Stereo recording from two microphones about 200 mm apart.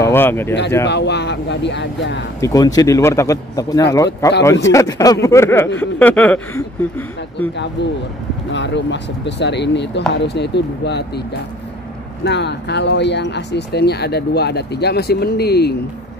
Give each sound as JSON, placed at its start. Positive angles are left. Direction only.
{"t": 0.0, "sound": "speech", "side_deg": 10}
{"t": 0.8, "sound": "speech", "side_deg": 60}
{"t": 2.4, "sound": "speech", "side_deg": 20}
{"t": 7.8, "sound": "speech", "side_deg": 60}
{"t": 12.3, "sound": "speech", "side_deg": 60}